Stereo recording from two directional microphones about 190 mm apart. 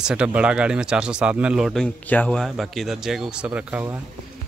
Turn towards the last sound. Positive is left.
turn(degrees=-10)  # may be behind; listen again after turning